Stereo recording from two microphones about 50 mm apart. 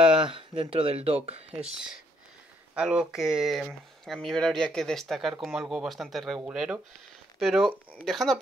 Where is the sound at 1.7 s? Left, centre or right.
Centre.